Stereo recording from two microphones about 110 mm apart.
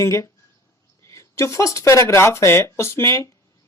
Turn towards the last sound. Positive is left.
turn(degrees=25)  # may be behind; listen again after turning